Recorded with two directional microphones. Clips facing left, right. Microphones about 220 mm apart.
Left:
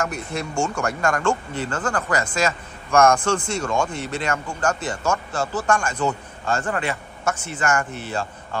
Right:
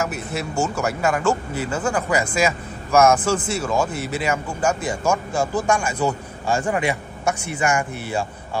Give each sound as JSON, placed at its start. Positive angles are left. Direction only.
{"t": 0.0, "sound": "speech", "side_deg": -5}